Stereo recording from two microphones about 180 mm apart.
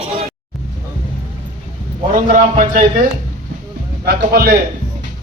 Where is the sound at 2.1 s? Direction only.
45° right (ahead or behind).